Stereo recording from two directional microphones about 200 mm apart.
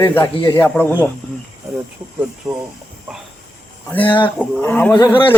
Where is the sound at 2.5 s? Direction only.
20° right (ahead or behind).